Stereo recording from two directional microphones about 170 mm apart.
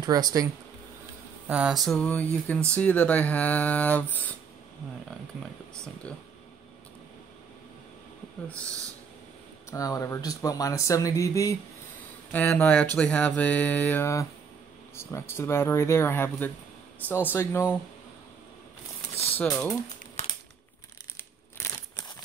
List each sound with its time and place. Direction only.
0.0 s speech: 20° right (ahead or behind)
1.5 s a sound: 5° right (ahead or behind)
2.0 s speech: 10° left (ahead or behind)
9.7 s speech: 20° left (ahead or behind)
19.4 s speech: 5° left (ahead or behind)
20.2 s crumpling: 40° left (ahead or behind)